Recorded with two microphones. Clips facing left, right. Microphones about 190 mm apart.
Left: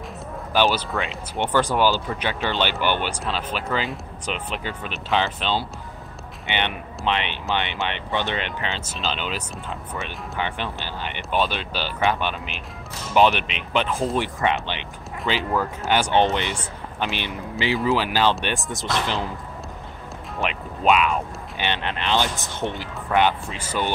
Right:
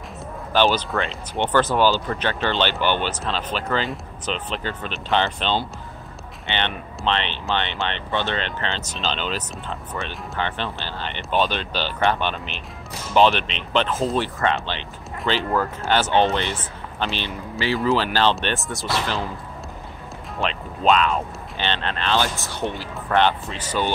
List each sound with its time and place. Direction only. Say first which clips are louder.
0.5 s speech: right 2 dB; 10° left (ahead or behind)
20.4 s speech: right 1 dB; 15° left (ahead or behind)